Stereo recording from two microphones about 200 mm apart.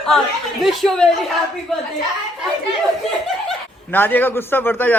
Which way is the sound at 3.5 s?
10° left (ahead or behind).